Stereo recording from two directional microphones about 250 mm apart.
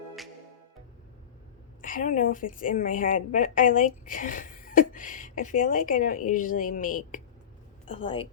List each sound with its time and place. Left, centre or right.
1.8 s a woman's voice: left
7.9 s a woman's voice: left